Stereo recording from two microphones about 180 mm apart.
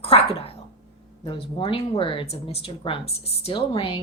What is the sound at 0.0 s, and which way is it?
A woman's voice, 30° left (ahead or behind).